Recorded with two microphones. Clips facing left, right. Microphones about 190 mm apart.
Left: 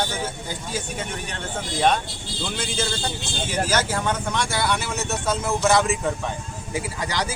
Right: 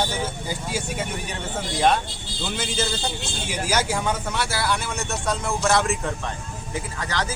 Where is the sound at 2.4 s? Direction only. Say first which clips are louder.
Right 1 dB; 5° right (ahead or behind).